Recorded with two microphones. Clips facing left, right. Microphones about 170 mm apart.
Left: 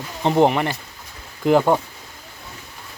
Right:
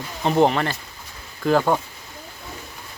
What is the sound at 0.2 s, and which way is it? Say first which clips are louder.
Speech: left 1 dB; 20° left (ahead or behind).